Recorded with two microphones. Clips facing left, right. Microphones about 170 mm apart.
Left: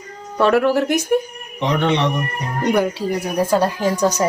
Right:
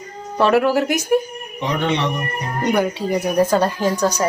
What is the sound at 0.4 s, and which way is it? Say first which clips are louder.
Speech: even; 5° right (ahead or behind).